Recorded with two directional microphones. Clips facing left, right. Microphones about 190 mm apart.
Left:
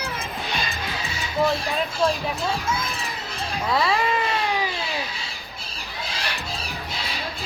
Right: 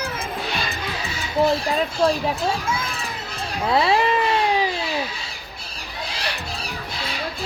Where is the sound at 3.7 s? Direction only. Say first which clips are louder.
Right 4 dB; 25° right (ahead or behind).